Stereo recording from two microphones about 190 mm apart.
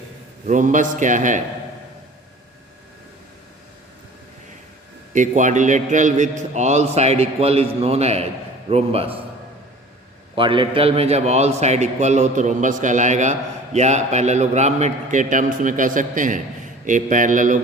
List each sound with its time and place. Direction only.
0.4 s a man's voice: 40° right (ahead or behind)
5.1 s a man's voice: 40° right (ahead or behind)
10.3 s a man's voice: 25° right (ahead or behind); by 17.6 s 40° right (ahead or behind)